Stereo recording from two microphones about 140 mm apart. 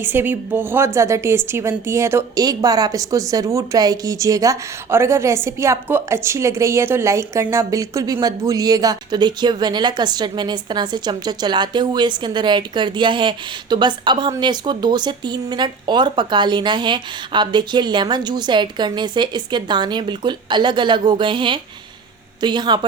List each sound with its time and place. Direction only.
0.0 s a woman's voice: 15° right (ahead or behind); by 22.9 s 35° right (ahead or behind)